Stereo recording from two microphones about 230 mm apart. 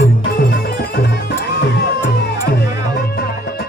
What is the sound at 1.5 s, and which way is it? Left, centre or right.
Music, left.